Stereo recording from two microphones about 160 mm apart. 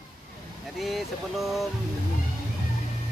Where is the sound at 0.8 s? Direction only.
Centre (ahead or behind).